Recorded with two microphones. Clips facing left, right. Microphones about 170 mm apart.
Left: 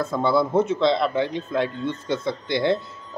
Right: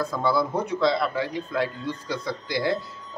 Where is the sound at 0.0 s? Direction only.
25° left (ahead or behind).